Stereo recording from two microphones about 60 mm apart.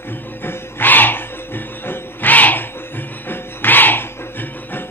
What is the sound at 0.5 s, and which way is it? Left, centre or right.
Music, left.